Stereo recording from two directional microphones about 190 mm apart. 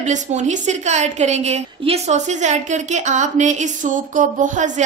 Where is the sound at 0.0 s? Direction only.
40° right (ahead or behind).